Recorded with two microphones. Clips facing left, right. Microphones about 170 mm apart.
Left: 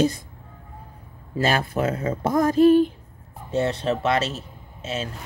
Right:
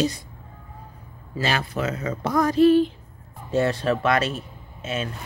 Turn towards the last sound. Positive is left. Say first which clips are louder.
# right 1 dB
turn(degrees=30)  # may be behind; listen again after turning